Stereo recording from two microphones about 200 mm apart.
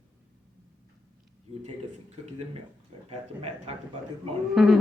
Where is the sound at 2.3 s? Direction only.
30° right (ahead or behind).